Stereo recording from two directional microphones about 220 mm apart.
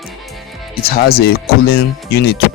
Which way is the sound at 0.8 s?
45° left (ahead or behind).